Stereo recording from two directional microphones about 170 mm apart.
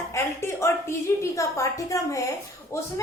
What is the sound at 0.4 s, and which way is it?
A woman's voice, 15° left (ahead or behind).